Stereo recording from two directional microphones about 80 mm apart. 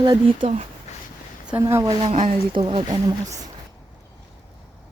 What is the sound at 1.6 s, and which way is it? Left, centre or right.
Speech, right.